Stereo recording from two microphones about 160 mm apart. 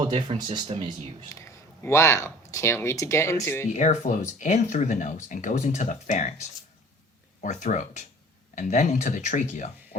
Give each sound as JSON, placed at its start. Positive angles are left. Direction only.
{"t": 0.0, "sound": "speech", "side_deg": -30}
{"t": 1.3, "sound": "speech", "side_deg": 20}
{"t": 3.7, "sound": "speech", "side_deg": 45}
{"t": 7.4, "sound": "speech", "side_deg": 50}